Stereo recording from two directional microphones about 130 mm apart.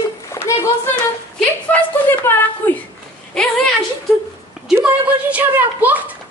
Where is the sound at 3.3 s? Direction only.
5° left (ahead or behind).